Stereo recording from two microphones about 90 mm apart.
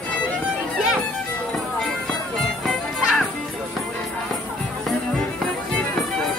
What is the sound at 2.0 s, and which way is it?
Music, 5° left (ahead or behind).